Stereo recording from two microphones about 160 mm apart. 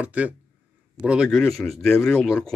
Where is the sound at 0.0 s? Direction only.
10° right (ahead or behind).